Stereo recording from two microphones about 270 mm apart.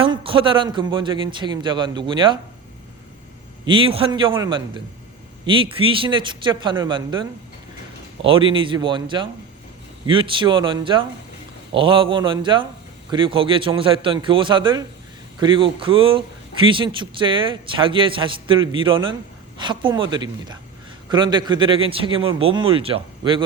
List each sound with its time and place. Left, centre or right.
0.0 s a man's voice: centre
3.7 s a man's voice: centre